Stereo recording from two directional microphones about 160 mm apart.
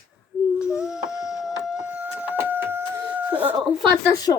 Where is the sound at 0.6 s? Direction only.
5° right (ahead or behind).